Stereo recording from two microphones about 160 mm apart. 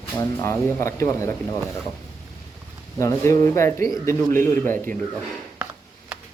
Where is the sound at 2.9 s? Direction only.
20° left (ahead or behind).